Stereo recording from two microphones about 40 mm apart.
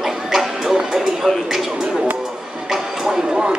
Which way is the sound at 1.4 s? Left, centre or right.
Centre.